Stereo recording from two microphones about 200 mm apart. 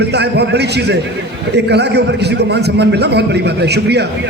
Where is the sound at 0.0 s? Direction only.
55° right (ahead or behind).